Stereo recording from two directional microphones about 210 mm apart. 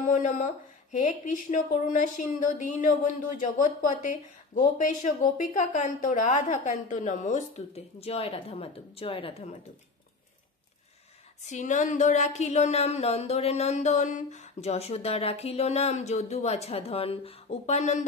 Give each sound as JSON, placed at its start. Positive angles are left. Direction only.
{"t": 0.0, "sound": "speech", "side_deg": 40}
{"t": 11.4, "sound": "speech", "side_deg": 35}